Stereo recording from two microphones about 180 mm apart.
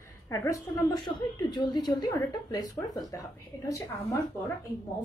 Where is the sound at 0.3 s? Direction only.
20° left (ahead or behind).